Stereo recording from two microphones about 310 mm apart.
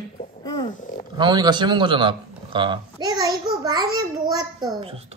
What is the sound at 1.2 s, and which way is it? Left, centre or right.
A man's voice, centre.